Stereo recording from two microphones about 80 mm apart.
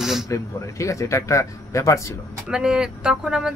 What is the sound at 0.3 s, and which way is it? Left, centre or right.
Speech, left.